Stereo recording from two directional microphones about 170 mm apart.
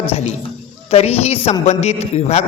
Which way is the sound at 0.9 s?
40° left (ahead or behind).